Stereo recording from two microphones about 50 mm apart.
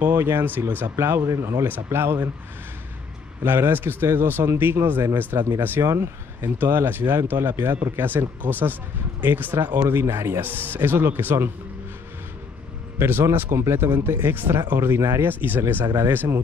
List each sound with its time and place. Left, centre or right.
0.0 s speech: right
0.9 s speech: right
1.9 s speech: right
3.4 s speech: right
5.8 s speech: right
6.4 s speech: right
10.4 s speech: right
13.3 s speech: right
15.0 s speech: right
15.2 s speech: right